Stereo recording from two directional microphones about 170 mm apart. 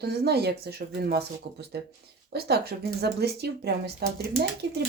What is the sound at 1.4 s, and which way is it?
Speech, 90° right.